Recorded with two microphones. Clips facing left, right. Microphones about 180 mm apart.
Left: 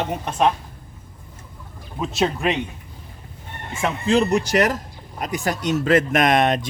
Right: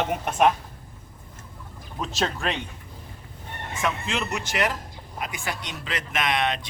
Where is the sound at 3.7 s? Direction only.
30° left (ahead or behind).